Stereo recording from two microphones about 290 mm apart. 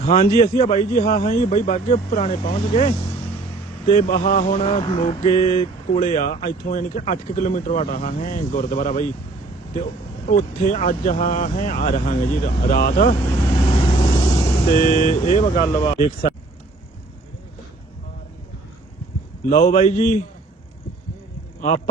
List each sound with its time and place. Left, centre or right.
0.0 s a man's voice: left
1.4 s mantra: left
10.2 s mantra: left
12.6 s a man's voice: left
13.4 s vehicle: centre
15.7 s mantra: centre
19.5 s mantra: left